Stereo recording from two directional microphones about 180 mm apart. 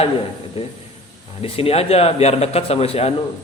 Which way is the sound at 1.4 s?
35° left (ahead or behind).